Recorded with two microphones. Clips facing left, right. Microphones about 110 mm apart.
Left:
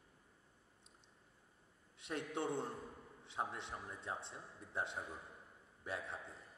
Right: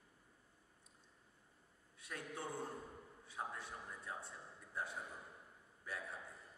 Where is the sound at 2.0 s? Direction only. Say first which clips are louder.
Left 6 dB; 25° left (ahead or behind).